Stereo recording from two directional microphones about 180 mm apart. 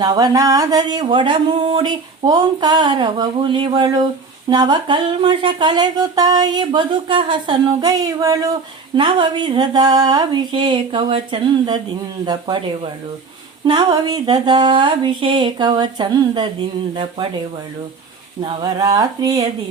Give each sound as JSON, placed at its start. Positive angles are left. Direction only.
{"t": 0.0, "sound": "speech", "side_deg": -20}
{"t": 18.4, "sound": "speech", "side_deg": -20}